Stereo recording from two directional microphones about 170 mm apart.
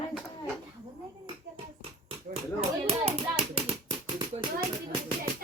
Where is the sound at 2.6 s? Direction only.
40° right (ahead or behind).